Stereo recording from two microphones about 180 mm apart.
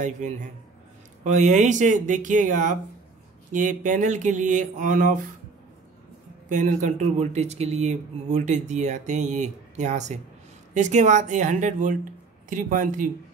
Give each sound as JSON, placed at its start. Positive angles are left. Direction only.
{"t": 0.0, "sound": "speech", "side_deg": -40}
{"t": 6.5, "sound": "speech", "side_deg": -45}